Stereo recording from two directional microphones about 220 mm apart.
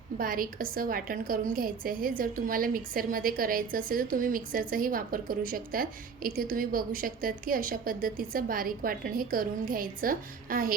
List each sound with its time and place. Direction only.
0.2 s a woman's voice: 40° right (ahead or behind)